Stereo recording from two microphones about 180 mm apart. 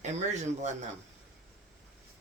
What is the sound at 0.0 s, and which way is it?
Speech, 40° right (ahead or behind).